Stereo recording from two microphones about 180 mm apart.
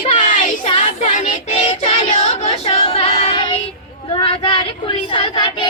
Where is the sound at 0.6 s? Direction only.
35° left (ahead or behind).